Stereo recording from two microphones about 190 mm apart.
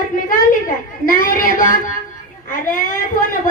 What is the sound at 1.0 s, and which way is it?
Speech, 45° left (ahead or behind).